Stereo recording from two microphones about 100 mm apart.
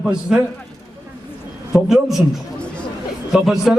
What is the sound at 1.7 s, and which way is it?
A man's voice, 5° right (ahead or behind).